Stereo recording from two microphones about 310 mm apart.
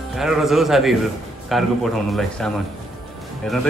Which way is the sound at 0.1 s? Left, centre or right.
Centre.